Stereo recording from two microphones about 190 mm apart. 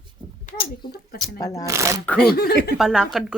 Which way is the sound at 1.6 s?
15° right (ahead or behind).